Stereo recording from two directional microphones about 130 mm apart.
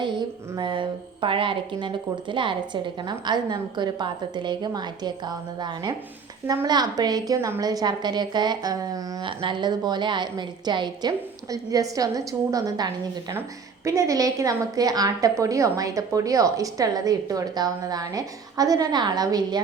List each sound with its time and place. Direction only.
0.0 s a woman's voice: 35° right (ahead or behind)